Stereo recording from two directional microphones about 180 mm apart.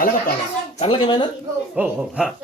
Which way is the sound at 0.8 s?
30° left (ahead or behind).